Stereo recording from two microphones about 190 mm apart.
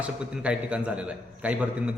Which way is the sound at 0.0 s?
5° right (ahead or behind).